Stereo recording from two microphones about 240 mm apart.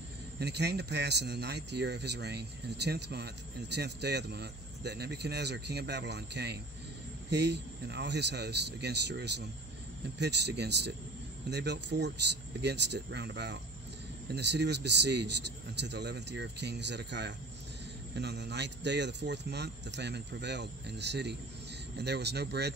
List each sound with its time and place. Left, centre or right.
0.4 s speech: right